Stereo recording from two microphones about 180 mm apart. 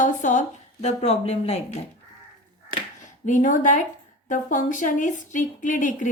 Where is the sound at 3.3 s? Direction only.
45° left (ahead or behind).